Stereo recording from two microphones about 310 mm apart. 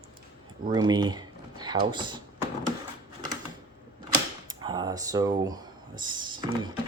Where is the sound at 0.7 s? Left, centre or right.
Centre.